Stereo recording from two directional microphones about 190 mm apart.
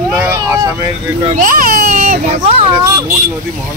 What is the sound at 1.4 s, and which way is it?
Speech, 45° right (ahead or behind).